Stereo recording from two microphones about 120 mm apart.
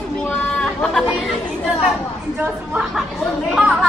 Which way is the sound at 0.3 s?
5° left (ahead or behind).